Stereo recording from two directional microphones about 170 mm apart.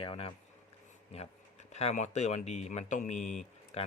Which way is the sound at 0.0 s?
30° left (ahead or behind).